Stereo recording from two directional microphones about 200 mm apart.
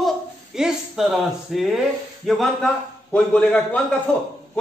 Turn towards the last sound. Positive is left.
turn(degrees=5)  # may be behind; listen again after turning